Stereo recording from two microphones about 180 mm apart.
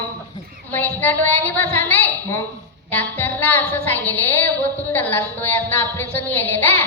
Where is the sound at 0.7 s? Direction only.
10° left (ahead or behind).